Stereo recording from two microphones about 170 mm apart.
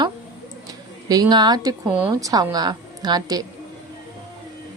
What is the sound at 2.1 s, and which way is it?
A woman's voice, 20° right (ahead or behind).